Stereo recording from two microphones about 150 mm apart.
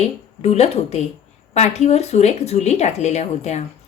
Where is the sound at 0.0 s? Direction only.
45° left (ahead or behind).